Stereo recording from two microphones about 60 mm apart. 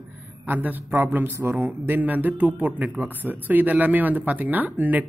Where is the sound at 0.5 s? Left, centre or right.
Right.